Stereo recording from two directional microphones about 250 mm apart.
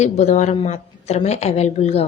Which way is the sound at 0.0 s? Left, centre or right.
Left.